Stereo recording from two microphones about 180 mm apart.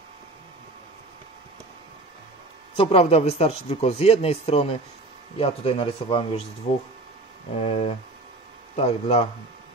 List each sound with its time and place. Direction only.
2.7 s speech: 30° left (ahead or behind)
7.6 s speech: 35° left (ahead or behind)